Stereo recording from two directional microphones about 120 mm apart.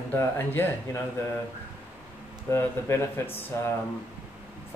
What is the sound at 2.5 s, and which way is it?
Speech, 20° left (ahead or behind).